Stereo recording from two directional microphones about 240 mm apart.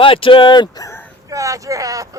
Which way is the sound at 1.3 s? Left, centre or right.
Centre.